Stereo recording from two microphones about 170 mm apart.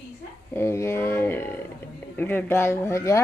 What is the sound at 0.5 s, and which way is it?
Speech, 15° left (ahead or behind).